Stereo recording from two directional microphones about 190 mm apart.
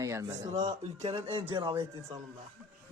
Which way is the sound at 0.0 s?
15° right (ahead or behind).